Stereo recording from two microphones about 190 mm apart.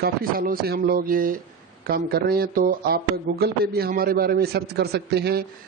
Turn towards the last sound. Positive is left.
turn(degrees=-60)  # may be behind; listen again after turning